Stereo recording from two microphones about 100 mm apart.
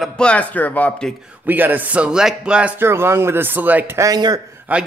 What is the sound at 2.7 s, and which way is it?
Speech, 25° right (ahead or behind).